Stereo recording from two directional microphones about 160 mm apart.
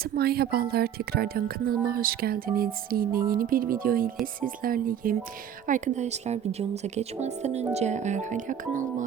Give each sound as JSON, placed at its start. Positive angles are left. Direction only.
{"t": 0.0, "sound": "speech", "side_deg": -75}
{"t": 5.6, "sound": "a woman's voice", "side_deg": -50}